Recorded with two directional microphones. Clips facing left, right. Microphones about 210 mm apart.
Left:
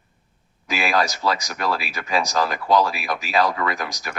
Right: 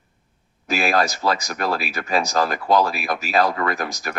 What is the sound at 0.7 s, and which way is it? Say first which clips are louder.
Speech: right 2 dB; 45° right (ahead or behind).